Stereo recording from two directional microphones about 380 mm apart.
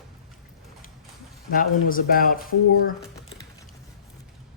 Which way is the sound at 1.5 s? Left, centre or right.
Left.